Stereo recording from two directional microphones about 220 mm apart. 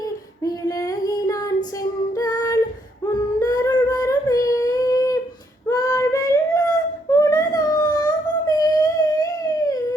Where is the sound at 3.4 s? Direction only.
15° left (ahead or behind).